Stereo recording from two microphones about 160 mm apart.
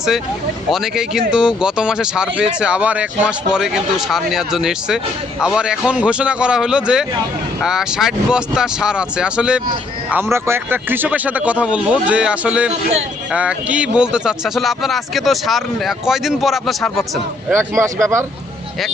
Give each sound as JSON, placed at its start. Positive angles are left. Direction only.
{"t": 0.7, "sound": "speech", "side_deg": 0}
{"t": 17.5, "sound": "speech", "side_deg": -15}